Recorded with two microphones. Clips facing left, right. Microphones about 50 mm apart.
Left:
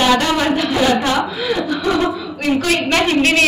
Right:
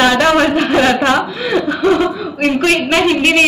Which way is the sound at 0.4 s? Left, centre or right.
Right.